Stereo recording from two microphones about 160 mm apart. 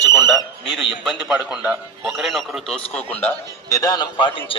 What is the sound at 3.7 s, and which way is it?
Speech, 20° left (ahead or behind).